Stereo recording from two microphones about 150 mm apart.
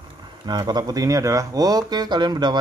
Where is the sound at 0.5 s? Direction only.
30° right (ahead or behind).